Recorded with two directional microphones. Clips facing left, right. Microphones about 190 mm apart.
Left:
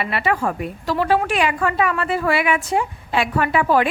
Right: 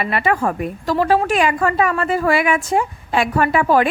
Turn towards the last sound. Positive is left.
turn(degrees=-45)  # may be behind; listen again after turning